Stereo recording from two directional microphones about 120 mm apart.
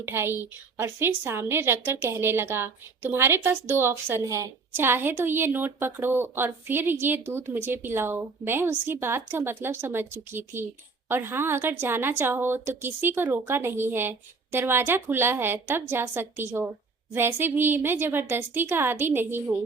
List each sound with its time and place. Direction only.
0.0 s a woman's voice: 20° right (ahead or behind)